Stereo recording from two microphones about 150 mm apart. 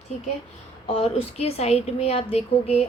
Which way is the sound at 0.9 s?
40° left (ahead or behind).